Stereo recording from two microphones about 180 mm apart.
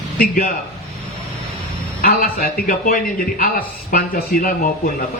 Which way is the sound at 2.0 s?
55° left (ahead or behind).